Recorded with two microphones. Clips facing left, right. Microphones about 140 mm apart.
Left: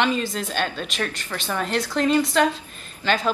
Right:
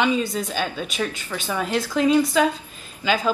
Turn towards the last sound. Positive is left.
turn(degrees=-10)  # may be behind; listen again after turning